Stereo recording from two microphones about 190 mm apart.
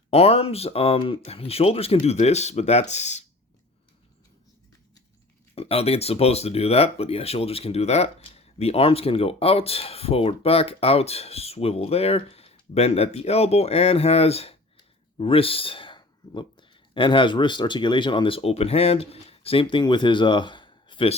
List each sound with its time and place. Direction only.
0.1 s speech: 30° left (ahead or behind)
5.5 s speech: 30° left (ahead or behind)